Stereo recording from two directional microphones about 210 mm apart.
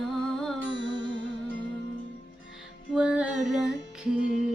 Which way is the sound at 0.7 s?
60° left (ahead or behind).